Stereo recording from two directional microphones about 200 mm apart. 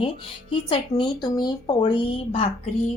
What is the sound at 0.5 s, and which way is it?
Speech, 25° left (ahead or behind).